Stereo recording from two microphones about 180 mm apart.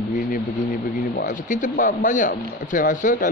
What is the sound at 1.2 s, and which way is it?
A man's voice, 45° left (ahead or behind).